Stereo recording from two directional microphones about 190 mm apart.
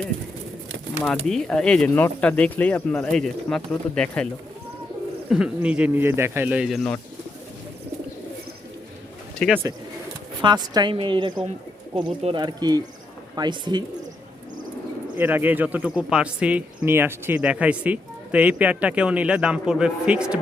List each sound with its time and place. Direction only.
1.0 s speech: 5° left (ahead or behind)
5.3 s speech: 5° right (ahead or behind)
9.4 s speech: 5° left (ahead or behind)
10.4 s a woman's voice: 25° right (ahead or behind)
15.2 s speech: 10° right (ahead or behind)